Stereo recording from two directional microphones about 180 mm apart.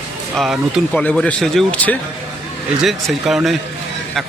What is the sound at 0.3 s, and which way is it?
A man's voice, centre (ahead or behind).